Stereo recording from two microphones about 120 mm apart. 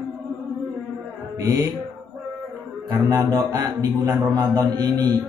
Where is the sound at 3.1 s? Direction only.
25° right (ahead or behind).